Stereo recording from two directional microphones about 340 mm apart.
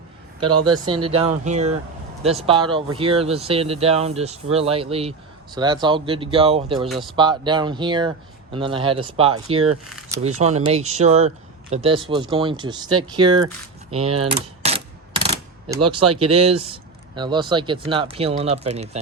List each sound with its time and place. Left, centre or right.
0.6 s speech: centre
6.8 s speech: centre
7.2 s speech: centre
14.6 s a sound: centre
15.7 s speech: centre